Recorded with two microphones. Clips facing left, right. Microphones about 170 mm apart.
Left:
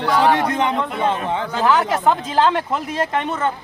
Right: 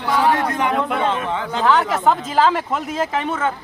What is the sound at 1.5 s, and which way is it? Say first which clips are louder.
Speech: even; 5° left (ahead or behind).